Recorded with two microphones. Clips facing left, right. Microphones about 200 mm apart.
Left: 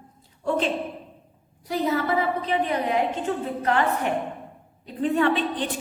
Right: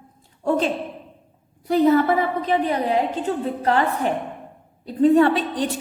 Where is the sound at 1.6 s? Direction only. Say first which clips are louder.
Right 8 dB; 55° right (ahead or behind).